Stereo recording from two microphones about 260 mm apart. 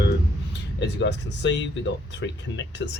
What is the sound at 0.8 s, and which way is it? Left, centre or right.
Speech, left.